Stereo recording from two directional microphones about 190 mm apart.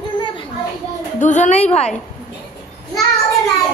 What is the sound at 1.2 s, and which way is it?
Speech, 40° left (ahead or behind).